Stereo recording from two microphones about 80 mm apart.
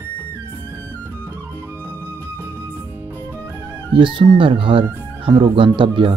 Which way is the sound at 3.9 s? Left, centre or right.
Right.